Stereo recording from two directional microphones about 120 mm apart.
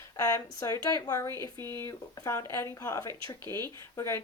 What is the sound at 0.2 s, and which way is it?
Speech, 30° left (ahead or behind).